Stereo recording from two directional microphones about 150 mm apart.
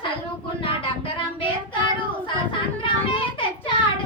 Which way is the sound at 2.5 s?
35° left (ahead or behind).